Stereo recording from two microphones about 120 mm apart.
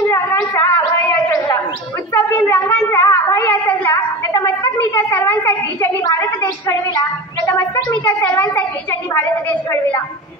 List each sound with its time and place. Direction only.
0.0 s gargling: 20° left (ahead or behind)
2.1 s a sound: 15° left (ahead or behind)
6.0 s a woman's voice: 30° left (ahead or behind)
9.1 s a woman's voice: 15° left (ahead or behind)